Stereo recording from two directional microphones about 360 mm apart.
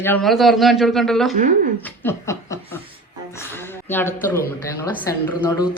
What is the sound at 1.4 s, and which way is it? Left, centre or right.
Speech, right.